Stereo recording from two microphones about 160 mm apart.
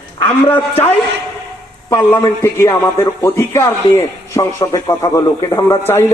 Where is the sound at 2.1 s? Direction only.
20° left (ahead or behind).